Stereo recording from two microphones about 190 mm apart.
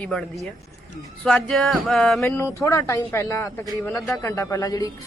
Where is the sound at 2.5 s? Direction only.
15° left (ahead or behind).